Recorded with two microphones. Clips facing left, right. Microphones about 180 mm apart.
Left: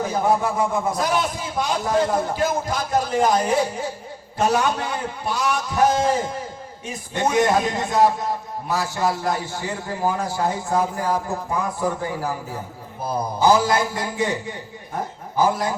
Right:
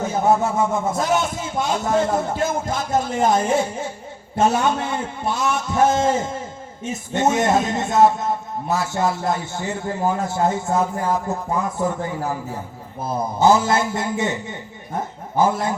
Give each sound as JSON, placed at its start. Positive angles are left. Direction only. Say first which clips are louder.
{"t": 0.0, "sound": "a man's voice", "louder": "right 2 dB", "side_deg": -25}
{"t": 13.1, "sound": "a man's voice", "louder": "right 1 dB", "side_deg": -25}